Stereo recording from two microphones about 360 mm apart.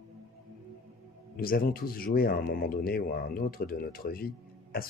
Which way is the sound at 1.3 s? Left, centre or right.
Left.